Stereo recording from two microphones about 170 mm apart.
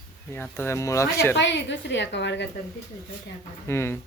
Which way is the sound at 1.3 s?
90° left.